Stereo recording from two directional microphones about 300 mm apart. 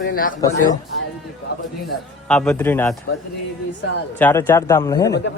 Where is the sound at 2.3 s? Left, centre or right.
Centre.